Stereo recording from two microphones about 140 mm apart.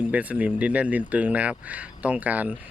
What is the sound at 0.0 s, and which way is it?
Speech, 10° right (ahead or behind).